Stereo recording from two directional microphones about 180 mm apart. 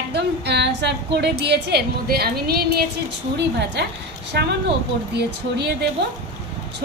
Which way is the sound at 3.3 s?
70° right (ahead or behind).